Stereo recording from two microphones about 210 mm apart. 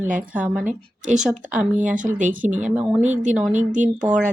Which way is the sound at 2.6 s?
5° right (ahead or behind).